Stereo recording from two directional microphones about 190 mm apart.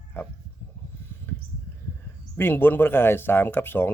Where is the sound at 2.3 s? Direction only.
10° left (ahead or behind).